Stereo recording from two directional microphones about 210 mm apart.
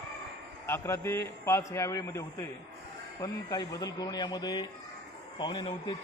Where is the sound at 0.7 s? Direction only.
15° left (ahead or behind).